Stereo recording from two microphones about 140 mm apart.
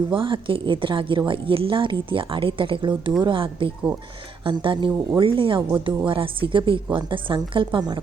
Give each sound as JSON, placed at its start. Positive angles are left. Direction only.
{"t": 0.1, "sound": "a woman's voice", "side_deg": -40}